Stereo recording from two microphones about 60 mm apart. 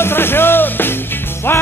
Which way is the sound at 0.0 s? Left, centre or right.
Left.